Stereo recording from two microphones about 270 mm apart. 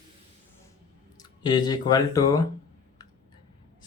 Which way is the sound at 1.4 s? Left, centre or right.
Centre.